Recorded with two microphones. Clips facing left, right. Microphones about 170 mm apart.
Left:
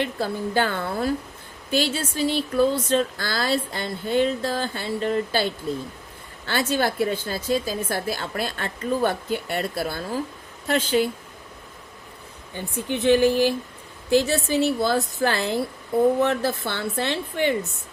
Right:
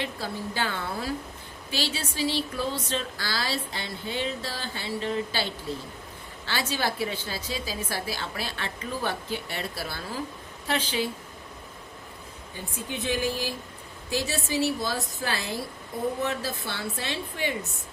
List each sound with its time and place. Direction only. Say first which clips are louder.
0.0 s speech: left 7 dB; 55° left (ahead or behind)
12.5 s a woman's voice: left 7 dB; 65° left (ahead or behind)